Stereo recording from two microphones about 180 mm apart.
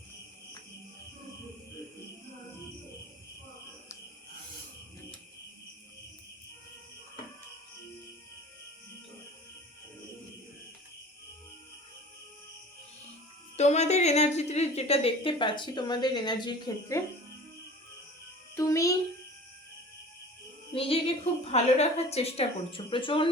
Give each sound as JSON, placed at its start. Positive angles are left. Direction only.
{"t": 13.6, "sound": "a woman's voice", "side_deg": 40}
{"t": 18.5, "sound": "music", "side_deg": 15}
{"t": 20.7, "sound": "music", "side_deg": 30}
{"t": 21.4, "sound": "a woman's voice", "side_deg": 35}